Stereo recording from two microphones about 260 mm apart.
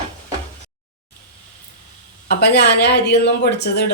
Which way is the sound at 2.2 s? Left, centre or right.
Left.